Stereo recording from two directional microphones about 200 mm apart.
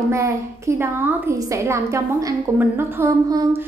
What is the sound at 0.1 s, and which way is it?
A woman's voice, 15° right (ahead or behind).